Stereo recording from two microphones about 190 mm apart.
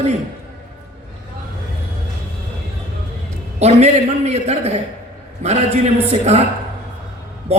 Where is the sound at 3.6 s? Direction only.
35° right (ahead or behind).